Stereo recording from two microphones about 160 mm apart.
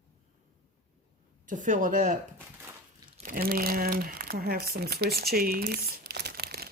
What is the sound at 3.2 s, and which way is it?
Crumpling, 65° right (ahead or behind).